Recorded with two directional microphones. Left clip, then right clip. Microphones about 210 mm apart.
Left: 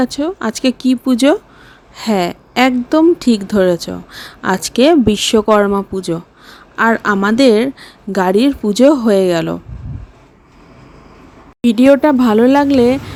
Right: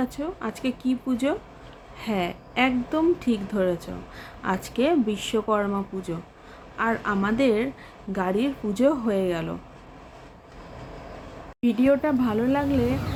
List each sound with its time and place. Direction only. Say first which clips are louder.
0.0 s speech: left 12 dB; 45° left (ahead or behind)
11.6 s speech: left 12 dB; 50° left (ahead or behind)